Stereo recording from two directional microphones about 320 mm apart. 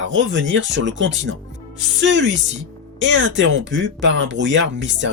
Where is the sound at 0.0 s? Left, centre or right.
Right.